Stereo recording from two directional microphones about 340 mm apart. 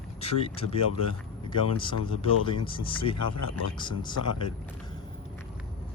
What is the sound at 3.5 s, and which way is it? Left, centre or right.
Speech, left.